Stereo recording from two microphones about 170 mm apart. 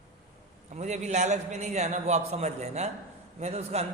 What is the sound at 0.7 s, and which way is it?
A man's voice, 40° right (ahead or behind).